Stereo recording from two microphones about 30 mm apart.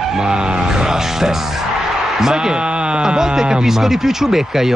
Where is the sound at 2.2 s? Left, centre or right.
Centre.